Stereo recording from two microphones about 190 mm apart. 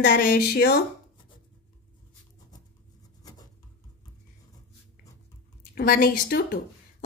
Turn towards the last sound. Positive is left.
turn(degrees=60)  # may be behind; listen again after turning